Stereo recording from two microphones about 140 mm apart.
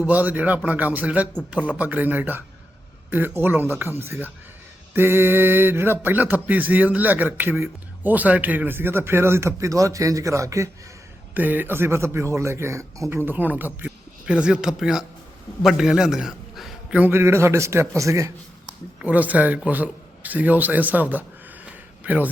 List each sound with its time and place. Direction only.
0.1 s a man's voice: 10° right (ahead or behind)
17.1 s a man's voice: 20° right (ahead or behind)
19.0 s a man's voice: 10° right (ahead or behind)